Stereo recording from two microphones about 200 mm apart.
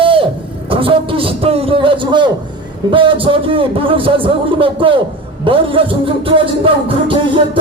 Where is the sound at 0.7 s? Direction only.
25° right (ahead or behind).